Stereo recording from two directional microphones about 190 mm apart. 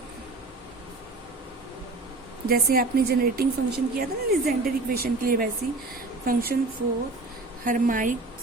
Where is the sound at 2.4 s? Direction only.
50° right (ahead or behind).